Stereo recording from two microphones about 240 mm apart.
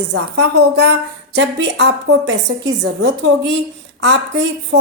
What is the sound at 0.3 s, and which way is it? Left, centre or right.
A woman's voice, right.